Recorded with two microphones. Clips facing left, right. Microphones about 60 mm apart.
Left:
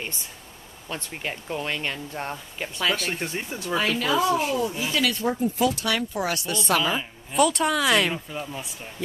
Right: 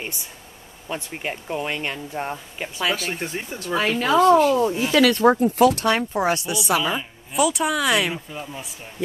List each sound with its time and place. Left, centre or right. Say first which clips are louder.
0.8 s speech: right 3 dB; centre
3.7 s speech: right 4 dB; centre
4.6 s speech: right 6 dB; right
4.9 s speech: right 11 dB; right
5.9 s speech: right 5 dB; right
6.5 s speech: right 1 dB; centre